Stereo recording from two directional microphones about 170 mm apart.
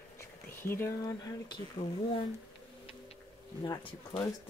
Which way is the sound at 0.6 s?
15° left (ahead or behind).